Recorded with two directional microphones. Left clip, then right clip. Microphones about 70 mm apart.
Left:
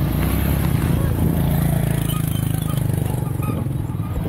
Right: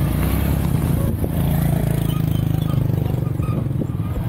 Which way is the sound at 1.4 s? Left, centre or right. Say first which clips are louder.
Even; centre.